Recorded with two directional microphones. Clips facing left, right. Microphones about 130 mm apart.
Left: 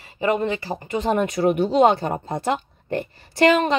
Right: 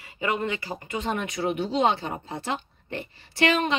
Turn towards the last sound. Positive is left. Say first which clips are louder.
# left 6 dB
turn(degrees=40)  # may be behind; listen again after turning